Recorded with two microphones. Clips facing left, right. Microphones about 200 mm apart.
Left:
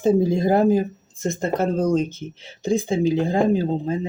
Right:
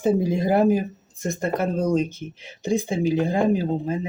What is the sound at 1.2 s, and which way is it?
Speech, 25° left (ahead or behind).